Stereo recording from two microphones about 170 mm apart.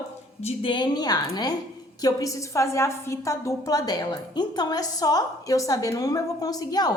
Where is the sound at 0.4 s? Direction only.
30° left (ahead or behind).